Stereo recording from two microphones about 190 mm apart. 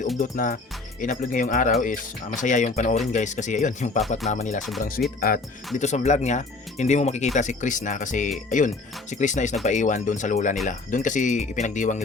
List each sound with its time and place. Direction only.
0.2 s speech: 45° left (ahead or behind)
5.0 s speech: 55° left (ahead or behind)
5.8 s speech: 35° left (ahead or behind)